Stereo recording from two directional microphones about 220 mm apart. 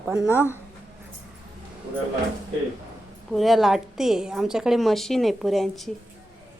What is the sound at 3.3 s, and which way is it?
A woman's voice, centre (ahead or behind).